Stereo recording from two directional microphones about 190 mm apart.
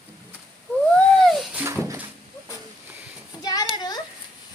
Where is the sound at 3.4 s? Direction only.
20° left (ahead or behind).